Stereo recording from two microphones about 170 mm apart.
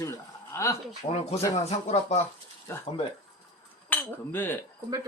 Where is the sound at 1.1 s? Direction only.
40° left (ahead or behind).